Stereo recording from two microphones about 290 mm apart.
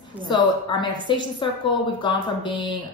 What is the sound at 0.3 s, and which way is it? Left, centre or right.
A woman's voice, centre.